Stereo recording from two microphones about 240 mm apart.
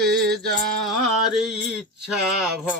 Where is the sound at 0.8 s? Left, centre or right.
Centre.